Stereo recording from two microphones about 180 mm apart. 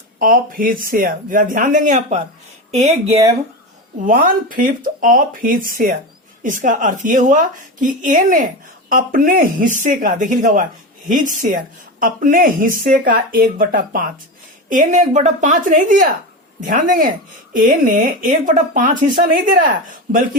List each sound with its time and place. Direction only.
0.2 s a woman's voice: 50° right (ahead or behind); by 3.2 s 35° right (ahead or behind)
4.0 s a woman's voice: 50° right (ahead or behind)